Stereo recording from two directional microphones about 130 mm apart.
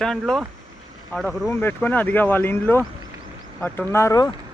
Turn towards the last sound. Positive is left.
turn(degrees=25)  # may be behind; listen again after turning